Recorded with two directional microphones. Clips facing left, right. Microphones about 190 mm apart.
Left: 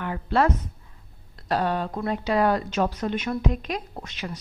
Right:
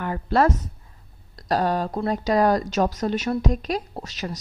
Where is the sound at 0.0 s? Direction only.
45° right (ahead or behind).